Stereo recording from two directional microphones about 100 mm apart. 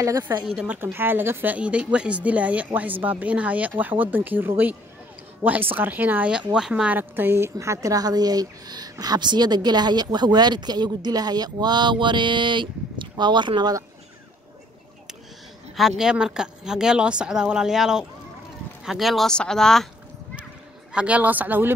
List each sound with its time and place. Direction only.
0.0 s a woman's voice: 30° right (ahead or behind)
0.5 s a woman's voice: 10° right (ahead or behind)
0.9 s a woman's voice: 20° right (ahead or behind); by 13.7 s 50° right (ahead or behind)
15.7 s a woman's voice: 5° right (ahead or behind)
20.9 s a woman's voice: 10° right (ahead or behind)